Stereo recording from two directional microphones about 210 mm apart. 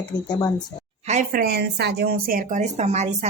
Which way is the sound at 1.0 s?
40° right (ahead or behind).